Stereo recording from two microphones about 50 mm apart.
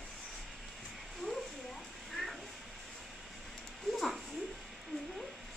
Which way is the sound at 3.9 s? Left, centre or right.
Centre.